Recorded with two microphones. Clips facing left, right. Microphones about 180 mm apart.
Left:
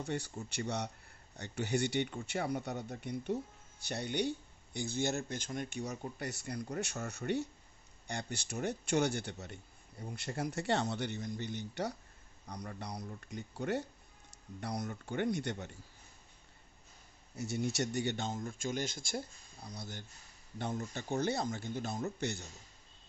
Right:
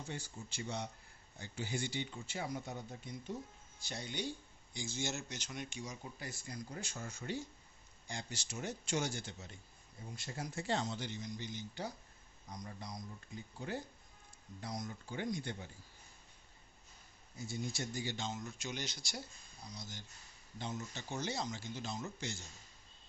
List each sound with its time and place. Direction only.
0.0 s speech: 65° left (ahead or behind)
17.3 s speech: 70° left (ahead or behind)
18.3 s speech: 50° left (ahead or behind)
19.6 s speech: 60° left (ahead or behind)